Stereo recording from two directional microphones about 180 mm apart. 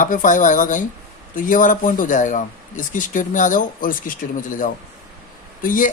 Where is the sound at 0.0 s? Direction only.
45° left (ahead or behind).